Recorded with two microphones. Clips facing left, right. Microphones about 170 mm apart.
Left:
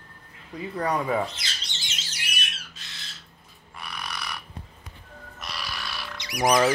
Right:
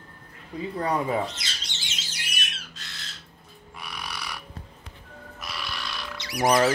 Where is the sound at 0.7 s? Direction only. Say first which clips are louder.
Left 1 dB; 25° right (ahead or behind).